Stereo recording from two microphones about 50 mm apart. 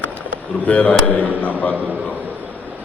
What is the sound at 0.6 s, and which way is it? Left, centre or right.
Speech, left.